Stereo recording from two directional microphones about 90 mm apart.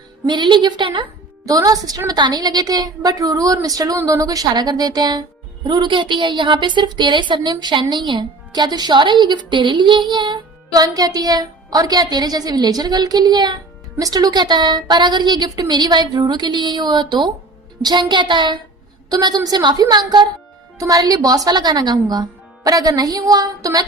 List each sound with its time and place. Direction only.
0.3 s a woman's voice: 60° right (ahead or behind)
1.5 s a woman's voice: 40° right (ahead or behind)
10.7 s a woman's voice: 40° right (ahead or behind); by 18.6 s 60° right (ahead or behind)
19.0 s speech: 45° right (ahead or behind)